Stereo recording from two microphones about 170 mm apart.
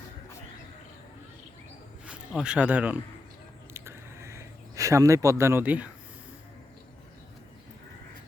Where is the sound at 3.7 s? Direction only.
15° right (ahead or behind).